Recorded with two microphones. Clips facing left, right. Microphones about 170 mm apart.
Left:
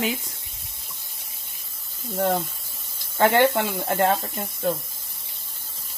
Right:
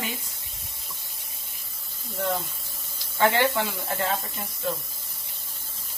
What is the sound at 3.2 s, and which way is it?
Speech, 50° left (ahead or behind).